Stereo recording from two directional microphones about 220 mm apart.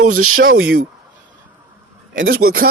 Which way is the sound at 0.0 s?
85° right.